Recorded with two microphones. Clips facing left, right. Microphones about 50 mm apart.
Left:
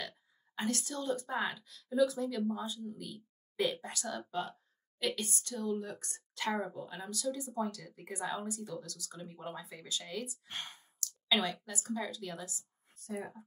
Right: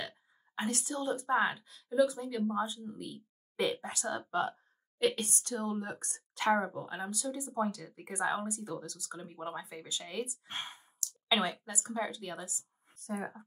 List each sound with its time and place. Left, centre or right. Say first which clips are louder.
0.6 s speech: right 1 dB; right
1.9 s speech: right 1 dB; centre
2.4 s speech: right 3 dB; right
6.3 s speech: right 6 dB; right
7.1 s speech: left 1 dB; centre; by 13.4 s right